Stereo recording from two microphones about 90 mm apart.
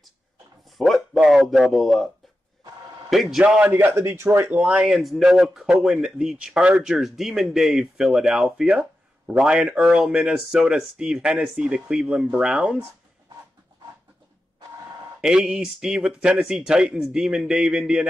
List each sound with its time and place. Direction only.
0.7 s a man's voice: centre (ahead or behind)
3.1 s speech: 5° right (ahead or behind)
3.7 s a man's voice: 25° right (ahead or behind)
4.5 s speech: 15° right (ahead or behind)
15.1 s speech: 5° right (ahead or behind)